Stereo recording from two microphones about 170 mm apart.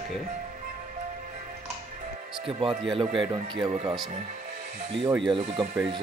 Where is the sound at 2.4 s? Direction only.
30° right (ahead or behind).